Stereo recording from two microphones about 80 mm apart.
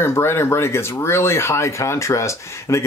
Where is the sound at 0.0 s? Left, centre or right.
Left.